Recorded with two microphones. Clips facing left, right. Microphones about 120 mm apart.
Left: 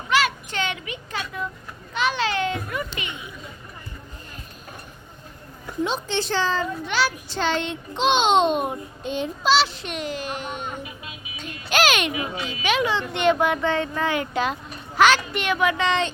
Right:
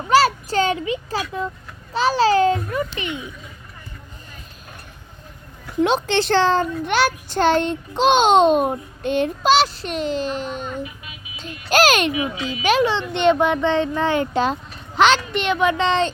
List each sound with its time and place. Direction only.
0.1 s a child's voice: 35° right (ahead or behind)
5.8 s a child's voice: 75° right (ahead or behind); by 8.7 s 40° right (ahead or behind)
9.0 s a child's voice: 60° right (ahead or behind); by 10.7 s 35° right (ahead or behind)
11.3 s a sound: 40° right (ahead or behind)
12.5 s a child's voice: 35° right (ahead or behind)